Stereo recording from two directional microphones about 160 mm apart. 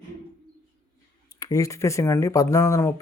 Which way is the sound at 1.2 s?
20° left (ahead or behind).